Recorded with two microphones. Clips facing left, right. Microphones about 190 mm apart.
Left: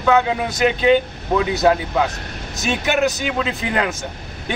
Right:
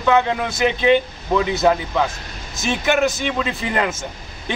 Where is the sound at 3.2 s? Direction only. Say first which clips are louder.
Even; 5° left (ahead or behind).